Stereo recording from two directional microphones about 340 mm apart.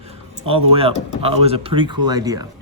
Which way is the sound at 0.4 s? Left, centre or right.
Centre.